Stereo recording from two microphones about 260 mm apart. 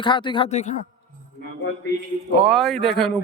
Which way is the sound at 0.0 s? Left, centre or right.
Centre.